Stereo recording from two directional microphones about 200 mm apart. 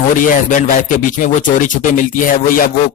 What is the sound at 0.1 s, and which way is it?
Speech, 40° left (ahead or behind).